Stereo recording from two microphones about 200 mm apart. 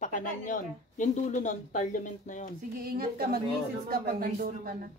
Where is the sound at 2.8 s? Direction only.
50° right (ahead or behind).